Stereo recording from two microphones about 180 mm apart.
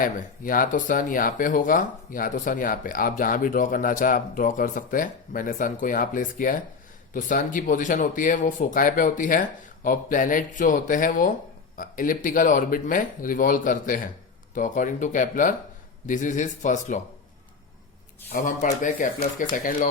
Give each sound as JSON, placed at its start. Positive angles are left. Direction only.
{"t": 0.0, "sound": "speech", "side_deg": 50}
{"t": 18.3, "sound": "speech", "side_deg": 45}